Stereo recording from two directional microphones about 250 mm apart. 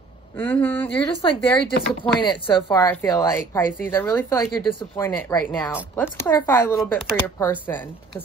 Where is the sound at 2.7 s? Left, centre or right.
Centre.